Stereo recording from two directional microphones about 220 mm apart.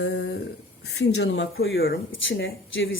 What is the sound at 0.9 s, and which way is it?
A woman's voice, 50° left (ahead or behind).